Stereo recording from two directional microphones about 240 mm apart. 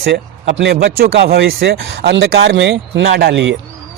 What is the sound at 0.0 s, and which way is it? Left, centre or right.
Speech, right.